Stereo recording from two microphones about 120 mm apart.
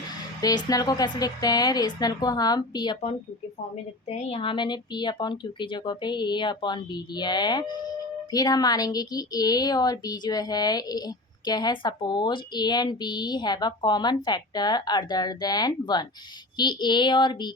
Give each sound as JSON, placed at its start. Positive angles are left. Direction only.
{"t": 0.4, "sound": "speech", "side_deg": 30}
{"t": 4.1, "sound": "speech", "side_deg": 55}